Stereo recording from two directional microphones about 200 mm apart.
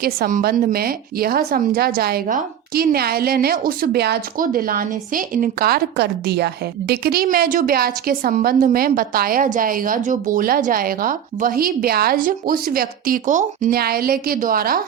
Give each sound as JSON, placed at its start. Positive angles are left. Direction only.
{"t": 0.0, "sound": "a woman's voice", "side_deg": -45}